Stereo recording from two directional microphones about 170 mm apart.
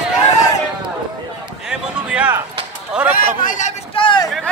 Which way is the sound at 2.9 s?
5° right (ahead or behind).